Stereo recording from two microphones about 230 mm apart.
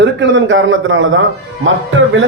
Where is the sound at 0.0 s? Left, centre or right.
Right.